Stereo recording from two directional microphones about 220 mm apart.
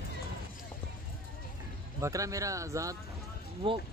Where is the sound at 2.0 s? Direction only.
15° right (ahead or behind).